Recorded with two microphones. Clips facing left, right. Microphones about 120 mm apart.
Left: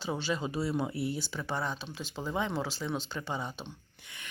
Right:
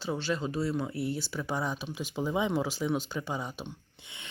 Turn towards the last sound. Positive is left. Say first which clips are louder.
# right 1 dB
turn(degrees=-10)  # may be behind; listen again after turning